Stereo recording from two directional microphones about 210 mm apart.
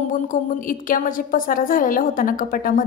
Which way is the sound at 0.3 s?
40° left (ahead or behind).